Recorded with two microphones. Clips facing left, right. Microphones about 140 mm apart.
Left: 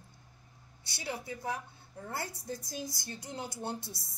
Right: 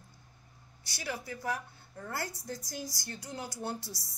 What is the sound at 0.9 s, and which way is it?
Speech, 25° left (ahead or behind).